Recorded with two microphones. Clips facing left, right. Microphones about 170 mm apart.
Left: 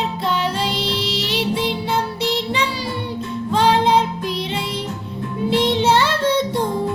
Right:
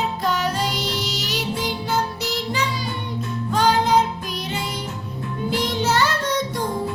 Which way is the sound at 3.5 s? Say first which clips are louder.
Left 2 dB; 30° left (ahead or behind).